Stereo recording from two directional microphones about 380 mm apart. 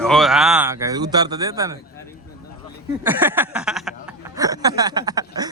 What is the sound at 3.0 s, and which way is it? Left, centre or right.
Speech, centre.